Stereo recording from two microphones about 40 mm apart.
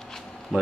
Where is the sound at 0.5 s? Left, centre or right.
Right.